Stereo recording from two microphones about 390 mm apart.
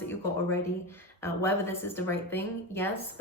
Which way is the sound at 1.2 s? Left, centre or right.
Centre.